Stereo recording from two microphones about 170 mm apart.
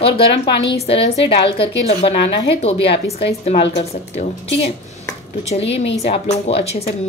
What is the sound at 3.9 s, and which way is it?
Speech, 40° left (ahead or behind).